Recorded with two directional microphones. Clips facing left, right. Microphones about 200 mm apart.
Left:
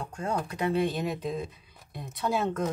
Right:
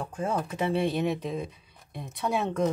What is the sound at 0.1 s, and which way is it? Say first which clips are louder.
Speech: right 1 dB; 5° right (ahead or behind).